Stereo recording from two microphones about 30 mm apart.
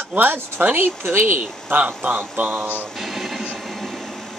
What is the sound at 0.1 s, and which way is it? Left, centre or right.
Speech, right.